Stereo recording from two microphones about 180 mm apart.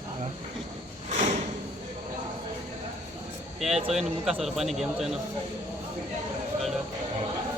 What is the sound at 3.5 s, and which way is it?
Speech, centre (ahead or behind).